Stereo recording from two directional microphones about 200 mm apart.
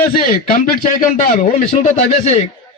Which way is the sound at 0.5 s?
40° left (ahead or behind).